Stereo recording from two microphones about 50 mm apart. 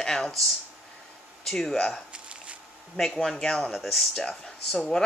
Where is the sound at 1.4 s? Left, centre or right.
Centre.